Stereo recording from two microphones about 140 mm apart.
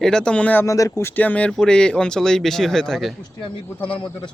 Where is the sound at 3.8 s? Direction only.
35° left (ahead or behind).